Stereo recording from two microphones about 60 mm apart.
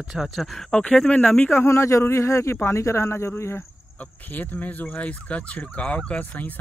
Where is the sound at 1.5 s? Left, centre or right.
Left.